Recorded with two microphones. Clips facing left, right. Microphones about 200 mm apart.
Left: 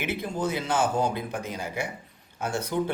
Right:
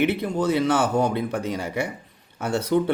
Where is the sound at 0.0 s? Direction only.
65° right (ahead or behind).